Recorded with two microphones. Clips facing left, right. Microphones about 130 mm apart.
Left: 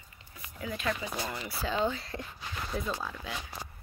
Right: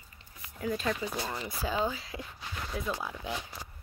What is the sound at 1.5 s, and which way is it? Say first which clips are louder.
Speech: left 2 dB; 10° right (ahead or behind).